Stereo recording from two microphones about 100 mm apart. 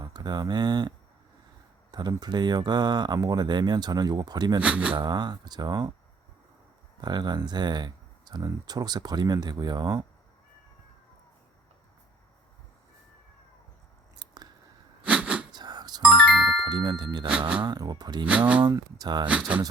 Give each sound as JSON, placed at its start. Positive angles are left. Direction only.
{"t": 0.0, "sound": "speech", "side_deg": -45}
{"t": 4.6, "sound": "speech", "side_deg": -15}
{"t": 4.9, "sound": "speech", "side_deg": -45}
{"t": 7.0, "sound": "speech", "side_deg": -45}
{"t": 15.0, "sound": "a sound", "side_deg": -15}
{"t": 15.5, "sound": "music", "side_deg": -45}
{"t": 16.0, "sound": "ding", "side_deg": -5}
{"t": 16.6, "sound": "speech", "side_deg": -45}
{"t": 19.3, "sound": "speech", "side_deg": -15}